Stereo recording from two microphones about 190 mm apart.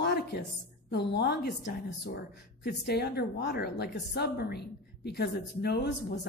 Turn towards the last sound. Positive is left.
turn(degrees=60)  # may be behind; listen again after turning